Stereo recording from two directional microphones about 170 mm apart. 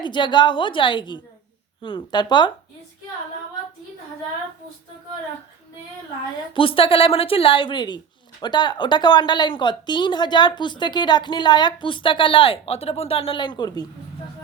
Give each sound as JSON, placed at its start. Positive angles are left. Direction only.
{"t": 0.0, "sound": "a woman's voice", "side_deg": 25}
{"t": 6.5, "sound": "a woman's voice", "side_deg": 30}